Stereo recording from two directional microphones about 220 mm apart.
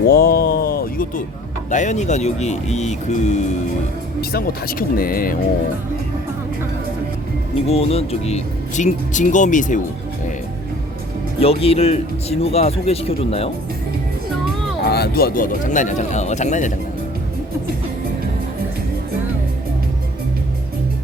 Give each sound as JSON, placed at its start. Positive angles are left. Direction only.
{"t": 0.1, "sound": "a sound", "side_deg": 45}
{"t": 1.7, "sound": "speech", "side_deg": 35}
{"t": 4.2, "sound": "speech", "side_deg": 45}
{"t": 7.5, "sound": "speech", "side_deg": 25}
{"t": 11.3, "sound": "speech", "side_deg": 25}
{"t": 14.8, "sound": "speech", "side_deg": 45}